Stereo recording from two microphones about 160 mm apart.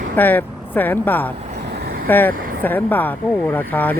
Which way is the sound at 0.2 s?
10° left (ahead or behind).